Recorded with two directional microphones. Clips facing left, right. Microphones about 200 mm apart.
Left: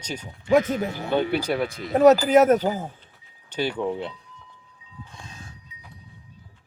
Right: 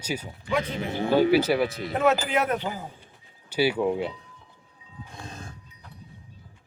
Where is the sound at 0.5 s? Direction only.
45° left (ahead or behind).